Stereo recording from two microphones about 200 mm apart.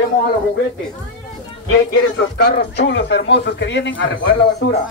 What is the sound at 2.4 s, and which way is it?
A man's voice, 60° left (ahead or behind).